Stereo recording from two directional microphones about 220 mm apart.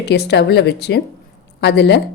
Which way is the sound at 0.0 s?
50° left (ahead or behind).